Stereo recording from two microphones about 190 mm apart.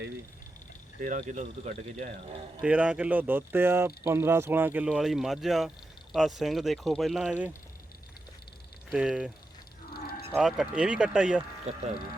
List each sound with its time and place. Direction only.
1.0 s speech: 40° right (ahead or behind)
2.6 s speech: 5° right (ahead or behind)
8.9 s speech: 5° right (ahead or behind)
9.9 s livestock: 55° left (ahead or behind)
10.3 s speech: 5° right (ahead or behind)
11.7 s speech: 35° right (ahead or behind)